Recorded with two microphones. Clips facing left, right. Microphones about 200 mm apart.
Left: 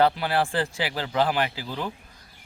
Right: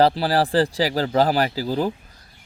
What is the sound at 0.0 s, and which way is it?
Speech, 35° right (ahead or behind).